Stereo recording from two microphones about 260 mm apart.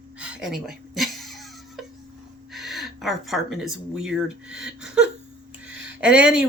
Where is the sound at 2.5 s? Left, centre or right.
Centre.